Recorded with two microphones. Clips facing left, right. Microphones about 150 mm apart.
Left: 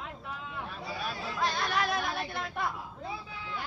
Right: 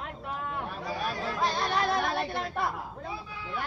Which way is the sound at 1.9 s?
55° right (ahead or behind).